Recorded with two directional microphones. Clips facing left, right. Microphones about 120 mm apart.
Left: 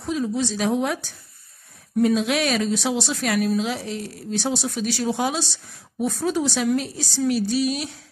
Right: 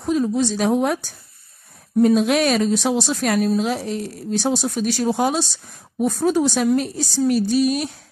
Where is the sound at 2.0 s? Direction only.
45° right (ahead or behind).